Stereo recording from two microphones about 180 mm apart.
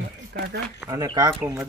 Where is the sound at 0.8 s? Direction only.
20° right (ahead or behind).